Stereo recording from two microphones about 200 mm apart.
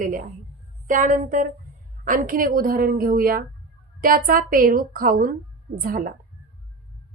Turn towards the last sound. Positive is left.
turn(degrees=-45)  # may be behind; listen again after turning